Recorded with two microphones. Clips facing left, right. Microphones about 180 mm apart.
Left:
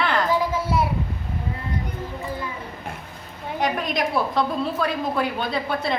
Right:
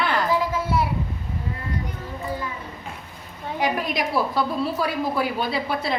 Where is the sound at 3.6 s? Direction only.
5° right (ahead or behind).